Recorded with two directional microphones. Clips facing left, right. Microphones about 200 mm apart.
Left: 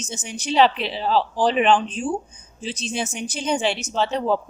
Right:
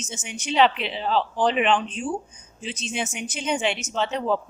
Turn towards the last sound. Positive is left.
turn(degrees=35)  # may be behind; listen again after turning